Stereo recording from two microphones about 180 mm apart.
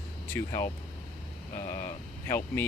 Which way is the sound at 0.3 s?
15° left (ahead or behind).